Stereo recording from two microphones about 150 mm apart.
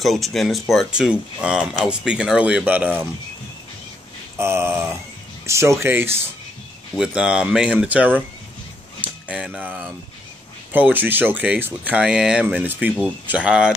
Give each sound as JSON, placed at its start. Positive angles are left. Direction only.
{"t": 0.0, "sound": "speech", "side_deg": 0}
{"t": 4.4, "sound": "speech", "side_deg": -15}
{"t": 9.3, "sound": "speech", "side_deg": -5}